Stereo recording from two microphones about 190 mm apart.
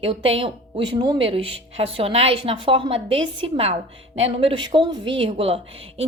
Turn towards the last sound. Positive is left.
turn(degrees=-30)  # may be behind; listen again after turning